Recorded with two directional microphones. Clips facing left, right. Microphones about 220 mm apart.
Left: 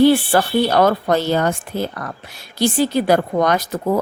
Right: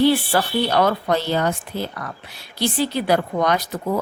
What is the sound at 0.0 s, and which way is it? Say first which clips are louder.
Speech: left 4 dB; 50° left (ahead or behind).